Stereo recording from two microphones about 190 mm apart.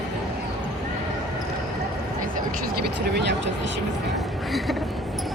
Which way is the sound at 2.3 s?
45° right (ahead or behind).